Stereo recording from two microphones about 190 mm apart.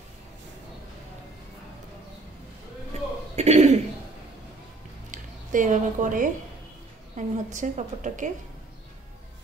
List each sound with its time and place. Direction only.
3.3 s a woman's voice: 35° right (ahead or behind)
5.1 s a woman's voice: 45° right (ahead or behind)